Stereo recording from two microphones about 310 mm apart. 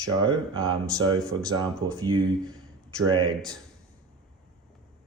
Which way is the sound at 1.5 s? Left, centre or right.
Centre.